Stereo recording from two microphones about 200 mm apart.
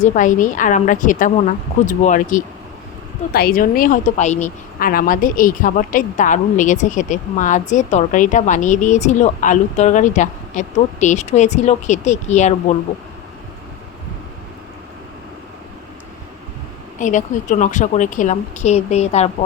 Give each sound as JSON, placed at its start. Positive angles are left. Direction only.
{"t": 0.0, "sound": "speech", "side_deg": 40}
{"t": 17.0, "sound": "speech", "side_deg": 40}